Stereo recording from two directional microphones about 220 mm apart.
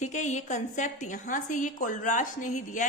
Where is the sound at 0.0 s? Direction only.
35° left (ahead or behind).